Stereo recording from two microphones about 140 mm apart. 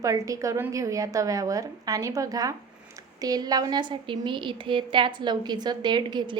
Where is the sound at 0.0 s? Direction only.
25° right (ahead or behind).